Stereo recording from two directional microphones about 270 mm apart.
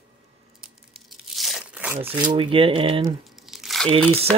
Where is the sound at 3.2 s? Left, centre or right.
Centre.